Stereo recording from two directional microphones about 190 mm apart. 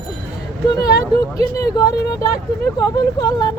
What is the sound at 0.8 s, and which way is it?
Speech, 20° left (ahead or behind).